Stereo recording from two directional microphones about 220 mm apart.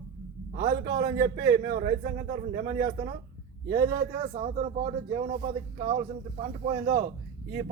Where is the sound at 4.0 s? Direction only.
35° right (ahead or behind).